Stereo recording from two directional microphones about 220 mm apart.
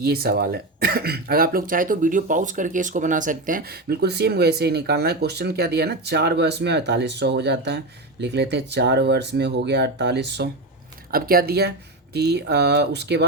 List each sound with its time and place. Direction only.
0.0 s speech: 45° right (ahead or behind)